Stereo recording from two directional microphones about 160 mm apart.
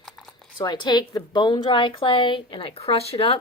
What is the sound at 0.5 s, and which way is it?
A woman's voice, 30° left (ahead or behind).